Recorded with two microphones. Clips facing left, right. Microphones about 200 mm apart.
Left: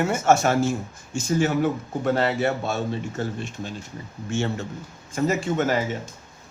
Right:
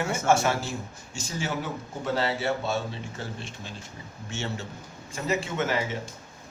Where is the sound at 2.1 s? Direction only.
55° left (ahead or behind).